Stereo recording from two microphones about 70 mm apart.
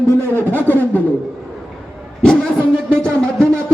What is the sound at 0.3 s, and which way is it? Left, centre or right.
Speech, left.